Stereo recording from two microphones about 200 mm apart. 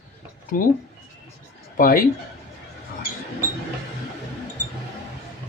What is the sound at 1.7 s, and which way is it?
Speech, 45° left (ahead or behind).